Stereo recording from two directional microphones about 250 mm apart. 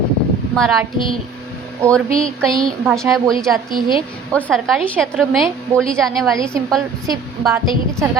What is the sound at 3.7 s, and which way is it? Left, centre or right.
Speech, centre.